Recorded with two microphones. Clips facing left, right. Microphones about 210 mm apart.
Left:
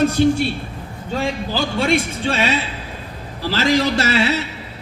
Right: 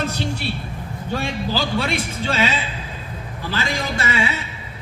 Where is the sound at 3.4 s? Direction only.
90° left.